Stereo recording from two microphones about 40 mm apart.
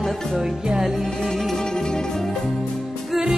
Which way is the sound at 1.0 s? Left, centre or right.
Centre.